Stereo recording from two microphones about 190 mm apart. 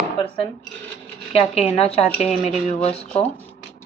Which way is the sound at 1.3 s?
30° left (ahead or behind).